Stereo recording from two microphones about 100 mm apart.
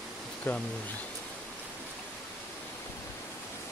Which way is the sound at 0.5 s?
20° left (ahead or behind).